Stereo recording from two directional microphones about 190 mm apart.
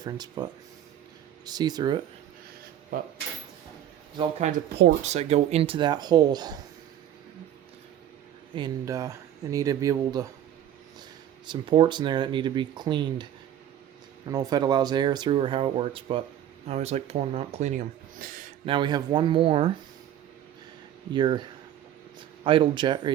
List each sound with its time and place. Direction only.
0.0 s speech: 20° right (ahead or behind)
4.2 s speech: 35° right (ahead or behind)
4.7 s speech: 60° right (ahead or behind)
5.0 s speech: 35° right (ahead or behind)
8.5 s speech: 20° right (ahead or behind)
11.4 s speech: 25° right (ahead or behind)
14.3 s speech: 20° right (ahead or behind); by 18.3 s 45° right (ahead or behind)
18.6 s speech: 25° right (ahead or behind)
21.1 s speech: 25° right (ahead or behind)
22.4 s speech: 25° right (ahead or behind)